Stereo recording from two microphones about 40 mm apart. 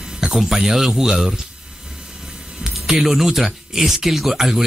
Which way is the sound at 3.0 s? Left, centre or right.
Centre.